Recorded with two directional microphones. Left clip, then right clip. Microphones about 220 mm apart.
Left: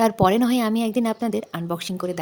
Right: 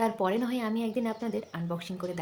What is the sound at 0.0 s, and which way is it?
Speech, 50° left (ahead or behind).